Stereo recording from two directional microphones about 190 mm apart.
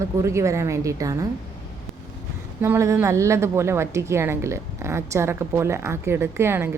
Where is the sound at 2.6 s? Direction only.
15° right (ahead or behind).